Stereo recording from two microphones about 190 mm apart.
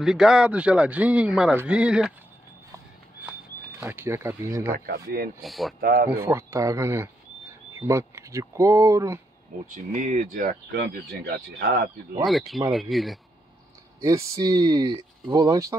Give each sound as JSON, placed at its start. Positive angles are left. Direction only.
{"t": 0.0, "sound": "speech", "side_deg": -5}
{"t": 3.8, "sound": "speech", "side_deg": -10}
{"t": 4.7, "sound": "speech", "side_deg": -50}
{"t": 5.4, "sound": "speech", "side_deg": 0}
{"t": 5.8, "sound": "speech", "side_deg": -50}
{"t": 6.2, "sound": "speech", "side_deg": -15}
{"t": 9.9, "sound": "speech", "side_deg": -40}
{"t": 10.7, "sound": "speech", "side_deg": -60}
{"t": 12.3, "sound": "speech", "side_deg": 0}
{"t": 14.4, "sound": "speech", "side_deg": -20}